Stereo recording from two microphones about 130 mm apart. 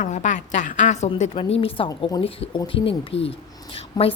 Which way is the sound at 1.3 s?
45° left (ahead or behind).